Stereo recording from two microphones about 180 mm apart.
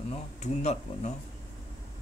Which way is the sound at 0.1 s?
40° left (ahead or behind).